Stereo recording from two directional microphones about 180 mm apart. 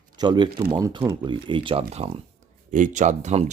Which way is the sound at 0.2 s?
25° right (ahead or behind).